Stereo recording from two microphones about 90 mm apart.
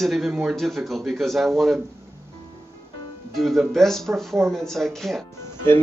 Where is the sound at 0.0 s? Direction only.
Centre (ahead or behind).